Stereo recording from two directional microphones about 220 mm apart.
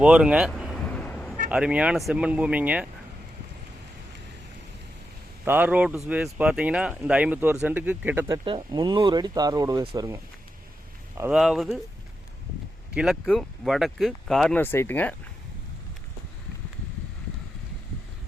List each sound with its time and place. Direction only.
0.0 s a sound: 5° right (ahead or behind)
1.5 s speech: 5° right (ahead or behind)
5.5 s speech: 10° right (ahead or behind)
8.3 s speech: 20° right (ahead or behind)
11.2 s speech: 5° right (ahead or behind)
12.9 s speech: 5° right (ahead or behind)